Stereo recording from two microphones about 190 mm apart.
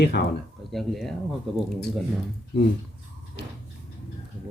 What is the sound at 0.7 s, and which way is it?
Speech, centre (ahead or behind).